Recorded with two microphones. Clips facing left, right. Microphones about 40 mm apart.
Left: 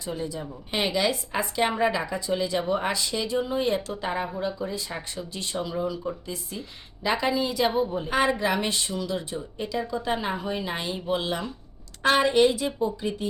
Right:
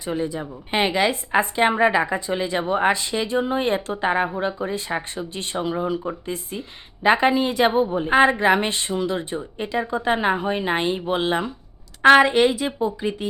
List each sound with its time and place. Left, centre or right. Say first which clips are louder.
0.0 s speech: right 6 dB; right